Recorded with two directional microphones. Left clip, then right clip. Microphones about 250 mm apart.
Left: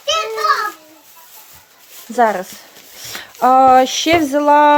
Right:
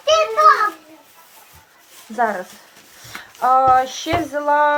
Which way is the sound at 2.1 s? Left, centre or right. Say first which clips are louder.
Left 6 dB; left.